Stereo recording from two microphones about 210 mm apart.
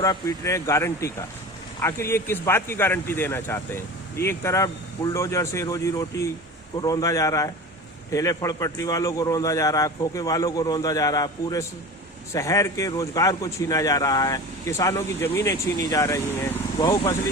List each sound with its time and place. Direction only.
0.0 s a man's voice: 15° left (ahead or behind)